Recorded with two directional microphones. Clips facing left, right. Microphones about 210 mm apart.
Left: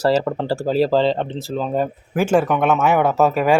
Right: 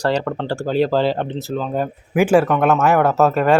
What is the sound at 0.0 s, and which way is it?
Speech, 5° left (ahead or behind).